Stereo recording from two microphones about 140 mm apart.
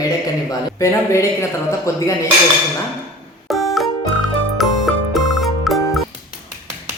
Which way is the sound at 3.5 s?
Centre (ahead or behind).